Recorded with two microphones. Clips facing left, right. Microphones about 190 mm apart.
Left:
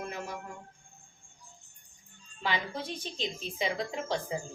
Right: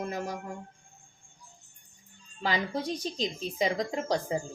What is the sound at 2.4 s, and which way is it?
A woman's voice, 40° right (ahead or behind).